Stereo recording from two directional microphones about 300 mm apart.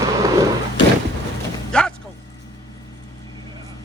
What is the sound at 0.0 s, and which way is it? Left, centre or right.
Boat, centre.